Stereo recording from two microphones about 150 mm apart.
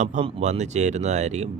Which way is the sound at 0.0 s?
50° right (ahead or behind).